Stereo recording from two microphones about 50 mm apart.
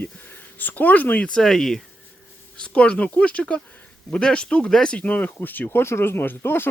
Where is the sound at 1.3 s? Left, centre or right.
Centre.